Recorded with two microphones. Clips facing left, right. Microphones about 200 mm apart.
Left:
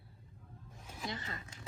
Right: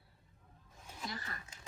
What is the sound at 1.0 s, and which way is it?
Speech, 20° left (ahead or behind).